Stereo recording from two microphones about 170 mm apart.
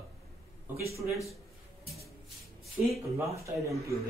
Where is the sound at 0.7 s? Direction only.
15° right (ahead or behind).